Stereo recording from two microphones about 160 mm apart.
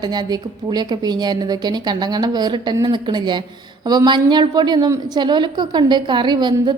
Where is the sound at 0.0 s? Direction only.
25° right (ahead or behind).